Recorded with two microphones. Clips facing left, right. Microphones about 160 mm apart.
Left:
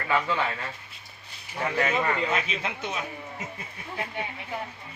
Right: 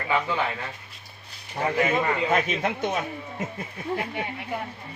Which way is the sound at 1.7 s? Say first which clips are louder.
Right 2 dB; 15° right (ahead or behind).